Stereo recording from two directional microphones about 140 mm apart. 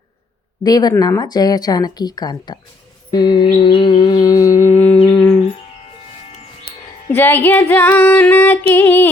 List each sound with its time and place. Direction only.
0.6 s speech: 30° left (ahead or behind)
3.1 s music: 30° left (ahead or behind)
5.1 s humming: 5° left (ahead or behind)
7.1 s female singing: 15° left (ahead or behind)